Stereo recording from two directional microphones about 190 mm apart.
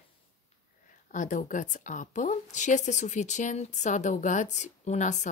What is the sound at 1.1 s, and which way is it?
Speech, 45° left (ahead or behind).